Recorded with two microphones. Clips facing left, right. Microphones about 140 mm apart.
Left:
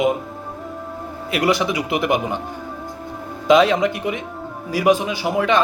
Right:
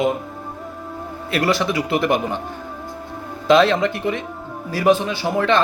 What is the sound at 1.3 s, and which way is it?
Speech, 15° left (ahead or behind).